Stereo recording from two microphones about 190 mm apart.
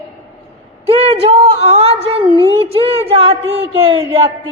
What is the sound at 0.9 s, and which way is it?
Speech, 30° right (ahead or behind).